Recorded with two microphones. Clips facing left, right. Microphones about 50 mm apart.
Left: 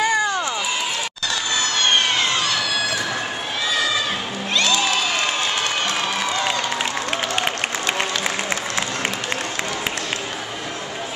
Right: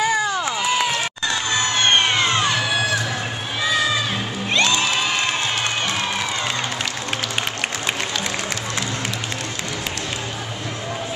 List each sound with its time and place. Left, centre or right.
0.0 s run: centre
1.6 s children shouting: right
4.6 s music: right